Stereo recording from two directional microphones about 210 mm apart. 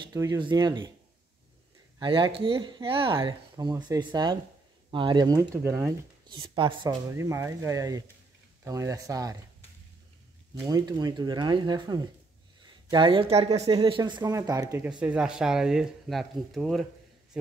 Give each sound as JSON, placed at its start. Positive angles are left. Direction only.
{"t": 0.0, "sound": "speech", "side_deg": -15}
{"t": 2.0, "sound": "speech", "side_deg": -20}
{"t": 10.6, "sound": "speech", "side_deg": -20}
{"t": 14.9, "sound": "speech", "side_deg": -5}